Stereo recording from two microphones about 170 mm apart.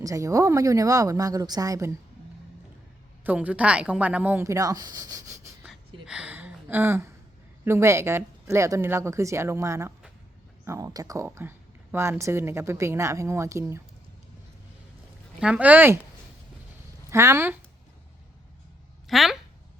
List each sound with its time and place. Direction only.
0.0 s a woman's voice: 20° right (ahead or behind)
3.2 s speech: 10° right (ahead or behind)
5.6 s a sound: 5° right (ahead or behind)
7.6 s speech: 15° right (ahead or behind)
15.4 s speech: 5° right (ahead or behind)
17.1 s speech: 15° right (ahead or behind)
19.0 s speech: centre (ahead or behind)